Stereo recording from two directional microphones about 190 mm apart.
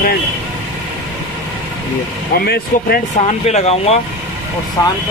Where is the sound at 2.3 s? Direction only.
55° left (ahead or behind).